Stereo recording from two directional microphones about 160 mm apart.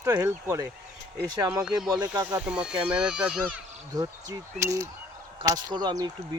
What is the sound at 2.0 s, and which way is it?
Speech, 25° right (ahead or behind).